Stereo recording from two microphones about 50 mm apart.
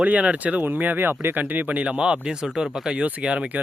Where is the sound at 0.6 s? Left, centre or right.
Right; by 3.0 s centre.